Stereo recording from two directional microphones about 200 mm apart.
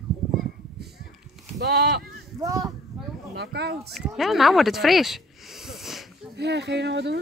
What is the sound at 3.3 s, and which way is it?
Speech, 55° right (ahead or behind).